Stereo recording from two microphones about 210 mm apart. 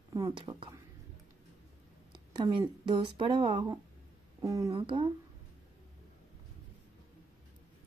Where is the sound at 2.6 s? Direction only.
20° right (ahead or behind).